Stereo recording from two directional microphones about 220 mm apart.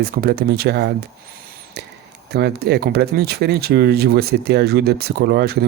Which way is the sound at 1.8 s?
50° right (ahead or behind).